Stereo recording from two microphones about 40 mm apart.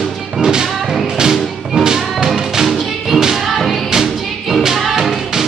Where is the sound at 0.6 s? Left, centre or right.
Centre.